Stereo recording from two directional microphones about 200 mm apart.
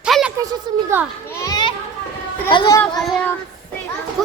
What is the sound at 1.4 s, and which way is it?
A child's voice, 20° left (ahead or behind).